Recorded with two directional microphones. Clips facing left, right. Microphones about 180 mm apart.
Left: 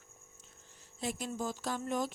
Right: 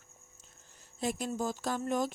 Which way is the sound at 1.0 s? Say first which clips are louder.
Right 4 dB; 45° right (ahead or behind).